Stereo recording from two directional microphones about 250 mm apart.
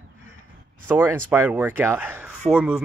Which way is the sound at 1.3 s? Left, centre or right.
Centre.